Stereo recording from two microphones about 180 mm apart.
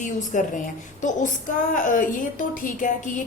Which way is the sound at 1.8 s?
45° left (ahead or behind).